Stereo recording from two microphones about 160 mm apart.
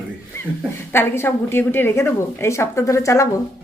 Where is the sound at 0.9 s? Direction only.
15° left (ahead or behind).